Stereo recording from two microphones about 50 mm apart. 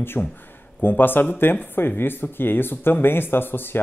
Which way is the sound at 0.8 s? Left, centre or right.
Left.